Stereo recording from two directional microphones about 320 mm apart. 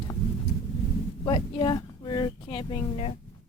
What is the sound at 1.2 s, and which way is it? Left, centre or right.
Speech, centre.